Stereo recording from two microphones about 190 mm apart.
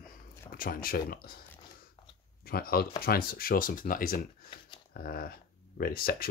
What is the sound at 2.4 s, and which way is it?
Speech, 55° left (ahead or behind).